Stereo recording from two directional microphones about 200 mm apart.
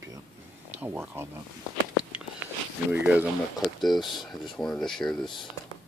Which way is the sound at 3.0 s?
5° right (ahead or behind).